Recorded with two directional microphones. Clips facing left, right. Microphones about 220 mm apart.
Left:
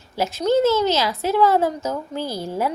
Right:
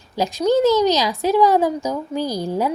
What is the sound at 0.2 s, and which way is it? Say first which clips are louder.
A woman's voice: right 2 dB; 15° right (ahead or behind).